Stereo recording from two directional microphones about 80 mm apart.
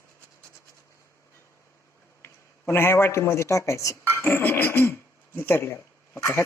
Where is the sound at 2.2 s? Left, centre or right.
Left.